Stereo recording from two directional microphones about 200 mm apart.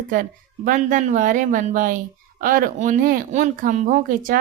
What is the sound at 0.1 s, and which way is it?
A woman's voice, 45° right (ahead or behind).